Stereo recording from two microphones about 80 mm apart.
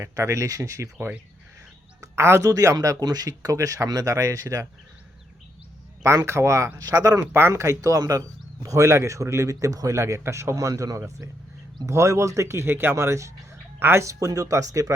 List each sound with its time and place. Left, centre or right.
0.0 s speech: right
2.0 s speech: right
6.0 s speech: right
6.7 s speech: right
7.3 s speech: right